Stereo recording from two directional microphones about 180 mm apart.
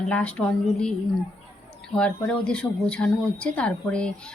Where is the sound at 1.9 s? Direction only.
5° left (ahead or behind).